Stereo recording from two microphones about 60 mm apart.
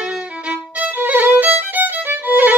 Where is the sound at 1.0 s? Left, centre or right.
Right.